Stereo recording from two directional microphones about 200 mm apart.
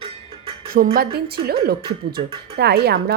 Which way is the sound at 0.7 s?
45° right (ahead or behind).